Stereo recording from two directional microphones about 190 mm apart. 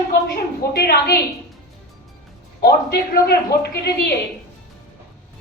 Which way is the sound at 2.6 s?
55° left (ahead or behind).